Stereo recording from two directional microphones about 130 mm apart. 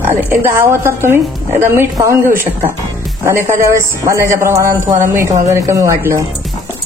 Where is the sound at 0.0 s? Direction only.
15° right (ahead or behind).